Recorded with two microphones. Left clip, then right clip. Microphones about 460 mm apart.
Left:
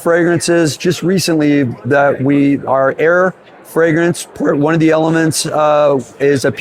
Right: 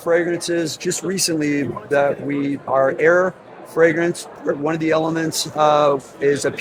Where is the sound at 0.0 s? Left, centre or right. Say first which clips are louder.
Left 6 dB; left.